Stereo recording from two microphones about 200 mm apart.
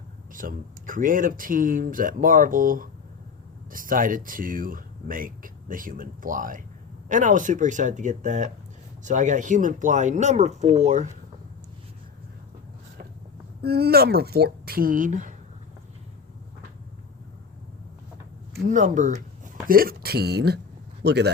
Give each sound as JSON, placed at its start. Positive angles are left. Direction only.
{"t": 0.3, "sound": "speech", "side_deg": -45}
{"t": 13.6, "sound": "speech", "side_deg": -50}
{"t": 18.7, "sound": "speech", "side_deg": -40}